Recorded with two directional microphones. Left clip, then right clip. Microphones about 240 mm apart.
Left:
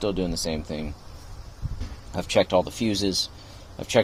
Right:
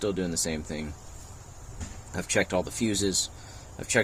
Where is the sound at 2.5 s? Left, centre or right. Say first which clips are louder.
Left 5 dB; centre.